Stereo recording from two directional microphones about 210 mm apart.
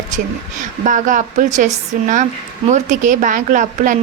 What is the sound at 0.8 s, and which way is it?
A woman's voice, 40° right (ahead or behind).